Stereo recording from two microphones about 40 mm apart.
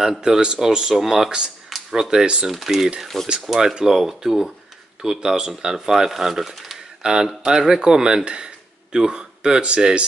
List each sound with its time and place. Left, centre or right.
0.0 s speech: centre
2.5 s speech: centre
3.1 s speech: centre
3.5 s speech: centre
7.0 s speech: centre